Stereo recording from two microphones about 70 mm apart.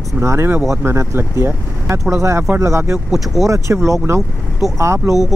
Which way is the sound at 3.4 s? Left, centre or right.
Right.